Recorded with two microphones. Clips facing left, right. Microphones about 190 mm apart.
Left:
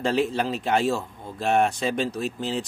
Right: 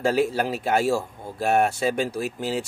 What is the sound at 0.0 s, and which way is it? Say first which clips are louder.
A man's voice: right 2 dB; 5° right (ahead or behind).